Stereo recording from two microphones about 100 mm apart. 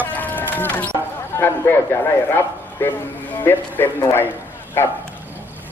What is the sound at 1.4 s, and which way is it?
A man's voice, 20° left (ahead or behind).